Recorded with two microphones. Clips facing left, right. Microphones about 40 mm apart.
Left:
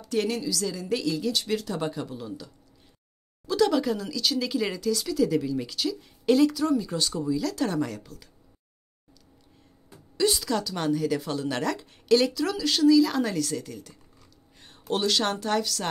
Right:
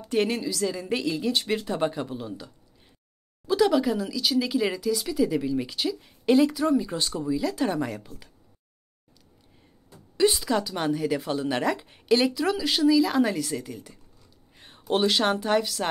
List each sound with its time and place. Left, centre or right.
0.0 s a woman's voice: right
3.4 s speech: centre
10.1 s speech: centre